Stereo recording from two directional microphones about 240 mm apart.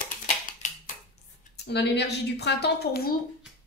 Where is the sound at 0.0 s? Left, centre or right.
Left.